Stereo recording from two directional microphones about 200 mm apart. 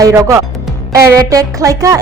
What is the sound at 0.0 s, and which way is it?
Speech, 15° right (ahead or behind).